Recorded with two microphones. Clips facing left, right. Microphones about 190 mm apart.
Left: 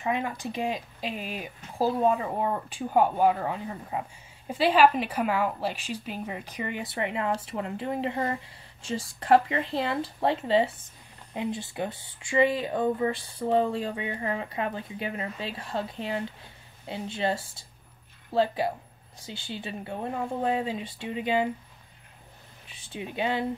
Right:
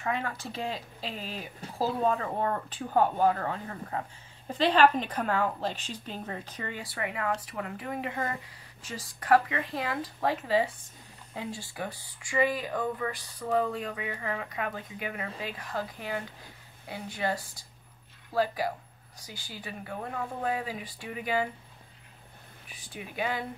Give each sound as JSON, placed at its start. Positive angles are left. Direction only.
{"t": 0.0, "sound": "a woman's voice", "side_deg": 15}
{"t": 22.7, "sound": "speech", "side_deg": 25}